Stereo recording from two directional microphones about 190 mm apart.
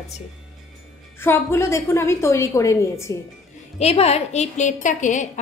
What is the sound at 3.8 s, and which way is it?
A woman's voice, 35° left (ahead or behind).